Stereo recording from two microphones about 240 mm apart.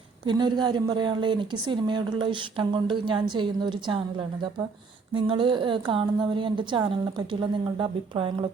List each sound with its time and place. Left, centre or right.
0.3 s a woman's voice: centre